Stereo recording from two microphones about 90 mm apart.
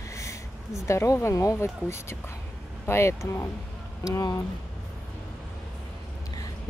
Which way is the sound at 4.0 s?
45° left (ahead or behind).